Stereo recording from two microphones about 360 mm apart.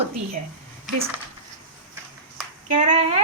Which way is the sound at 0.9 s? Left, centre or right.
Centre.